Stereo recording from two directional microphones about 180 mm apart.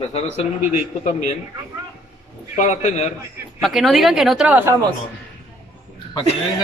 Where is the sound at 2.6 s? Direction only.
40° left (ahead or behind).